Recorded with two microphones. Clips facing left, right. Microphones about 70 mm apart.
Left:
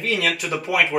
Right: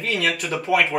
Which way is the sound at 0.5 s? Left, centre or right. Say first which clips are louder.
Right 2 dB; left.